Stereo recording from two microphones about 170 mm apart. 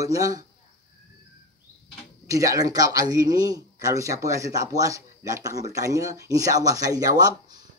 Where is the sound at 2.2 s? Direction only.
20° right (ahead or behind).